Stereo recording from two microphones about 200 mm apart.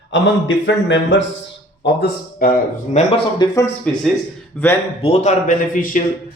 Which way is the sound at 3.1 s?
20° left (ahead or behind).